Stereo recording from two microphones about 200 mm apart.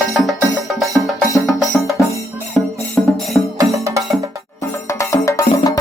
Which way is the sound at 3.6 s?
15° right (ahead or behind).